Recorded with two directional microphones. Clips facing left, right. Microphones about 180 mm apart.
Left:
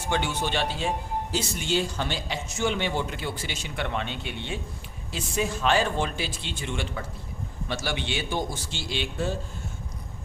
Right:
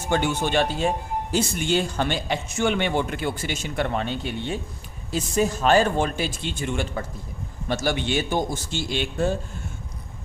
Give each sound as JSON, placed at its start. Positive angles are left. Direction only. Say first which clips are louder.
{"t": 0.1, "sound": "speech", "louder": "right 5 dB", "side_deg": -50}